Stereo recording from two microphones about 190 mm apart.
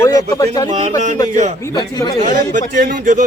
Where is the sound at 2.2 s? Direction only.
45° right (ahead or behind).